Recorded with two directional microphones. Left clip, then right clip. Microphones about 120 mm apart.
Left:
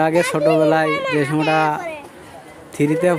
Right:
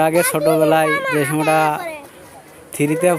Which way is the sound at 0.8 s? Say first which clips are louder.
Right 1 dB; 50° right (ahead or behind).